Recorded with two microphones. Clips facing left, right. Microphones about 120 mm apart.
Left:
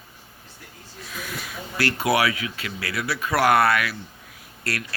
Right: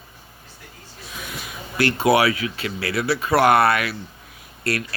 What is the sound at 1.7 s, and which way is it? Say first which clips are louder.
Speech: right 4 dB; 25° right (ahead or behind).